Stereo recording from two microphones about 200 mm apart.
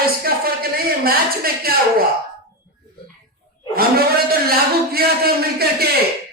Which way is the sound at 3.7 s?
50° right (ahead or behind).